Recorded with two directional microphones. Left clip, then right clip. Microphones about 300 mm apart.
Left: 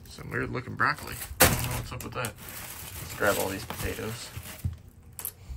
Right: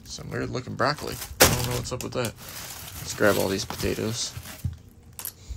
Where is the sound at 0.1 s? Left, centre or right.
Centre.